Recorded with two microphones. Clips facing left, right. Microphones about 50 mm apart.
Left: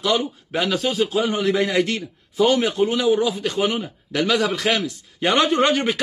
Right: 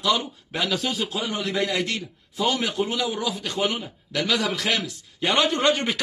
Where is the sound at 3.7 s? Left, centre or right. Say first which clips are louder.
Left 3 dB; centre.